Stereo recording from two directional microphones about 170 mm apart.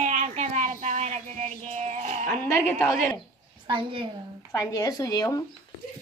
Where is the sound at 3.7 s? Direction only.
30° right (ahead or behind).